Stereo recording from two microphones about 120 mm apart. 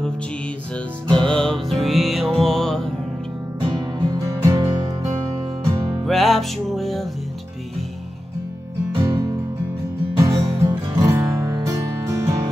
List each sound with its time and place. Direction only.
1.0 s music: 40° right (ahead or behind)
1.3 s music: 5° left (ahead or behind)
3.6 s music: 35° right (ahead or behind)
6.0 s music: centre (ahead or behind)
8.9 s music: 30° right (ahead or behind)